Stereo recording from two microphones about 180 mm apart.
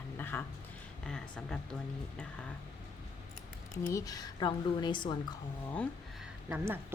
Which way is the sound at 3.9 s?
20° left (ahead or behind).